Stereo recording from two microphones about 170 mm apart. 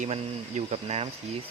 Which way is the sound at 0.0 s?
40° right (ahead or behind).